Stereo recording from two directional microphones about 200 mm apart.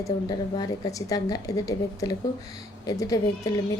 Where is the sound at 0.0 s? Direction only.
20° left (ahead or behind).